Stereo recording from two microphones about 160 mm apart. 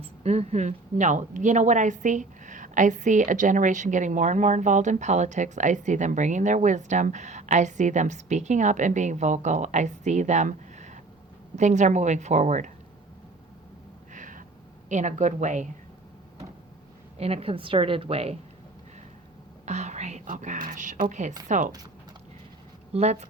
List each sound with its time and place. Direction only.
0.0 s speech: 40° right (ahead or behind)
14.1 s a sound: 55° right (ahead or behind)
14.8 s speech: 50° right (ahead or behind)
17.2 s a woman's voice: 40° right (ahead or behind)
19.6 s speech: 45° right (ahead or behind)
22.9 s speech: 40° right (ahead or behind)